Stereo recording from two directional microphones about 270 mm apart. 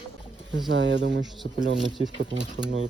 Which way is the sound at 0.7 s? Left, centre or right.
Right.